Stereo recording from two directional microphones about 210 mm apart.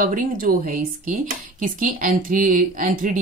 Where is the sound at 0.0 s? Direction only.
40° right (ahead or behind).